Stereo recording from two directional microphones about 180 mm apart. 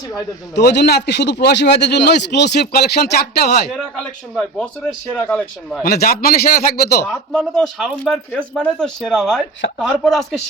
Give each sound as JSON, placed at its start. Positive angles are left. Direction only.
{"t": 0.5, "sound": "speech", "side_deg": 70}
{"t": 4.4, "sound": "a man's voice", "side_deg": 5}
{"t": 5.8, "sound": "speech", "side_deg": 55}
{"t": 7.1, "sound": "speech", "side_deg": 5}